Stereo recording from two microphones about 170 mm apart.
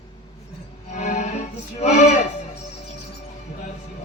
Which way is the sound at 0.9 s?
45° left (ahead or behind).